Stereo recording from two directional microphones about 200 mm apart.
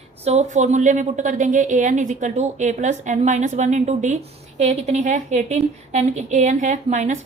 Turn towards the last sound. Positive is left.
turn(degrees=-35)  # may be behind; listen again after turning